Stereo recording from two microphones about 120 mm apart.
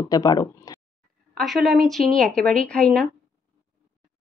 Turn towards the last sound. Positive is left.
turn(degrees=10)  # may be behind; listen again after turning